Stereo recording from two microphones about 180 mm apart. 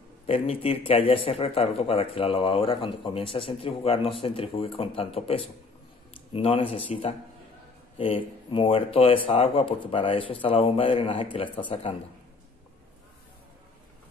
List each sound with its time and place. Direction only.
0.3 s speech: 30° left (ahead or behind)